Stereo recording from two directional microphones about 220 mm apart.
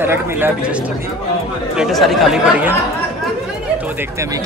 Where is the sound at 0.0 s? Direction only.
10° right (ahead or behind).